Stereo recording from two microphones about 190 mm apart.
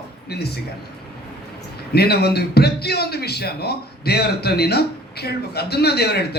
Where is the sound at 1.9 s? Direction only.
55° left (ahead or behind).